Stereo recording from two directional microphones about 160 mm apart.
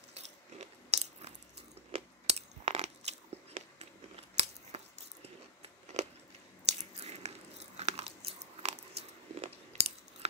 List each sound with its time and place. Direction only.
0.6 s biting: 40° right (ahead or behind)
1.9 s crunch: 40° right (ahead or behind)
4.4 s scissors: 40° right (ahead or behind)
4.7 s a sound: 40° right (ahead or behind)
6.6 s biting: 40° right (ahead or behind)
8.9 s a sound: 40° right (ahead or behind)